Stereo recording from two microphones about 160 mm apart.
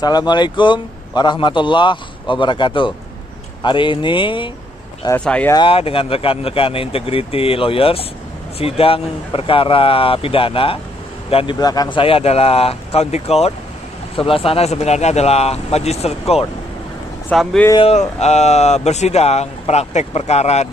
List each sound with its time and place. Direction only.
0.0 s a man's voice: 25° left (ahead or behind)
5.2 s speech: 5° left (ahead or behind)
5.5 s speech: 30° left (ahead or behind)
11.6 s speech: 25° left (ahead or behind); by 16.4 s 40° left (ahead or behind)
17.3 s speech: 5° left (ahead or behind)
17.7 s speech: 40° left (ahead or behind)